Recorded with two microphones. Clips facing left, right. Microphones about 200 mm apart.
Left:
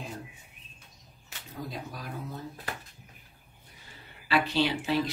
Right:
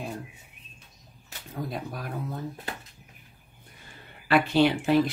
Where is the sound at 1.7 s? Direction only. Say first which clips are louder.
Right 5 dB; 55° right (ahead or behind).